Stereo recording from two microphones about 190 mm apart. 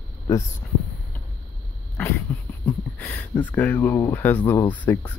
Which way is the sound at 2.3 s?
10° left (ahead or behind).